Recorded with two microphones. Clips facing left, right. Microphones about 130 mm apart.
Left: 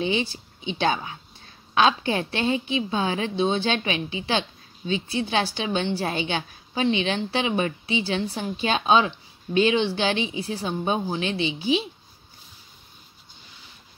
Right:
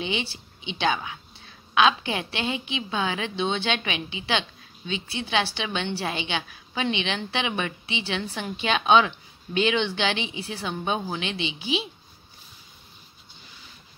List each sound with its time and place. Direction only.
0.0 s a woman's voice: 40° left (ahead or behind)